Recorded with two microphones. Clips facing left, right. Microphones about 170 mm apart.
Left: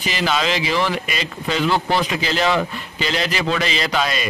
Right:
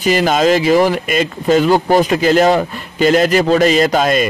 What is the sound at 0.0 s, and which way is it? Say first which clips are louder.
A man's voice: right 9 dB; 45° right (ahead or behind).